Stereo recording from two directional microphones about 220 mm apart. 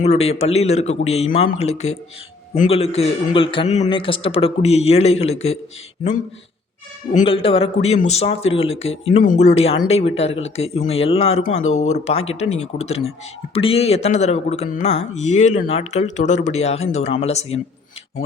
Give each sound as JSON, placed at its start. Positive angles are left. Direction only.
{"t": 0.0, "sound": "speech", "side_deg": 30}
{"t": 7.1, "sound": "speech", "side_deg": 30}